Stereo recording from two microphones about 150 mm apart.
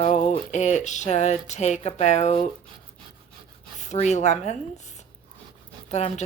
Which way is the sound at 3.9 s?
50° left (ahead or behind).